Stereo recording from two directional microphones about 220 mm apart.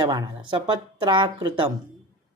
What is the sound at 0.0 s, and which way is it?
Speech, 20° right (ahead or behind).